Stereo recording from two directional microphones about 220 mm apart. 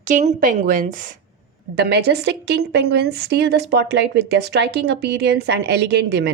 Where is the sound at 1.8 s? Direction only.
50° right (ahead or behind).